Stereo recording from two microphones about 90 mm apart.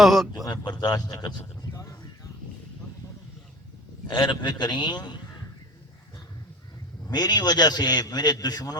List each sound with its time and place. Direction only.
0.0 s speech: centre (ahead or behind)
0.4 s a man's voice: 50° left (ahead or behind)
1.7 s a sound: 40° left (ahead or behind)
4.1 s a man's voice: 65° left (ahead or behind)
7.1 s a man's voice: 50° left (ahead or behind)